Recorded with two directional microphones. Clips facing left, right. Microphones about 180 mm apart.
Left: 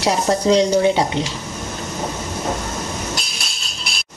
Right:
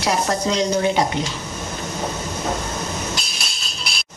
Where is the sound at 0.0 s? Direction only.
30° left (ahead or behind).